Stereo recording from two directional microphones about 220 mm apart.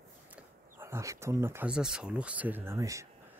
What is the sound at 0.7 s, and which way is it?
Speech, 10° right (ahead or behind).